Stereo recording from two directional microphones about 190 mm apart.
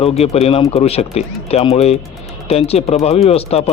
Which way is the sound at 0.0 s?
30° left (ahead or behind).